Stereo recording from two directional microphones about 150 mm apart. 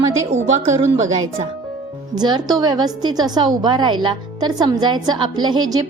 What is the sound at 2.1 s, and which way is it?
A woman's voice, 30° right (ahead or behind).